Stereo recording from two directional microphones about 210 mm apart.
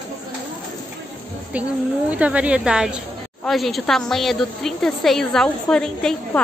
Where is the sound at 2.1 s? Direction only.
5° right (ahead or behind).